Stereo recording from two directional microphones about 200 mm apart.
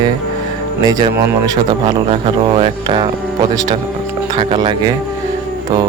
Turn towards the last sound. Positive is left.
turn(degrees=-25)  # may be behind; listen again after turning